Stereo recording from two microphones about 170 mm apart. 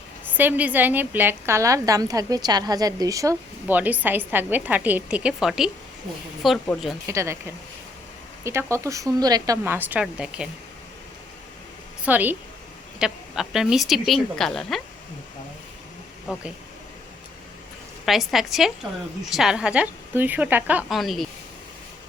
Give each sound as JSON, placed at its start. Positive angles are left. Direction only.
{"t": 0.3, "sound": "a woman's voice", "side_deg": -10}
{"t": 7.1, "sound": "a woman's voice", "side_deg": -15}
{"t": 8.4, "sound": "a woman's voice", "side_deg": -15}
{"t": 12.0, "sound": "a woman's voice", "side_deg": -10}
{"t": 18.0, "sound": "a woman's voice", "side_deg": 0}